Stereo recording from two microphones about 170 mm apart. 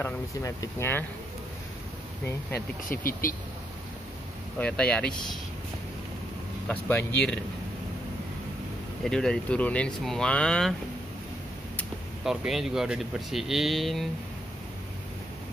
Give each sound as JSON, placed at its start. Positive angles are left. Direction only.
{"t": 0.0, "sound": "speech", "side_deg": 15}
{"t": 2.9, "sound": "speech", "side_deg": 55}
{"t": 4.6, "sound": "speech", "side_deg": 5}
{"t": 6.7, "sound": "speech", "side_deg": 10}
{"t": 9.0, "sound": "speech", "side_deg": 5}
{"t": 12.3, "sound": "speech", "side_deg": 0}